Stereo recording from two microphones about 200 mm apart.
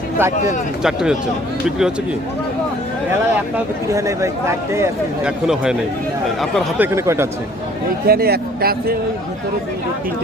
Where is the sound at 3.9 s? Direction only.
15° right (ahead or behind).